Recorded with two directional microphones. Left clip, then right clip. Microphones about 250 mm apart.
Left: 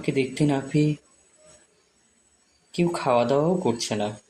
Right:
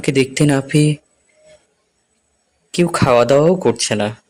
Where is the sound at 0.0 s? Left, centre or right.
Right.